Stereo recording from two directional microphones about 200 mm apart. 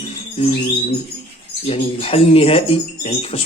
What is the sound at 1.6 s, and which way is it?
Speech, 30° left (ahead or behind).